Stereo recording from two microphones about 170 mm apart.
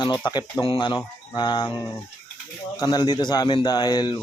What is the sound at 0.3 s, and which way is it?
Speech, 25° left (ahead or behind).